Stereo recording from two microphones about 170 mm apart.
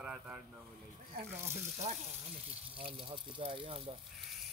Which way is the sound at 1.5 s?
40° right (ahead or behind).